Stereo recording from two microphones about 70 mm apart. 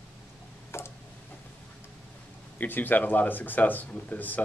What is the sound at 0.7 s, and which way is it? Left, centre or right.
Tick-tock, left.